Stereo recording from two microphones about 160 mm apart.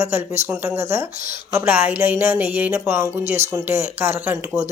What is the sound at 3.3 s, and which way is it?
Speech, 45° right (ahead or behind).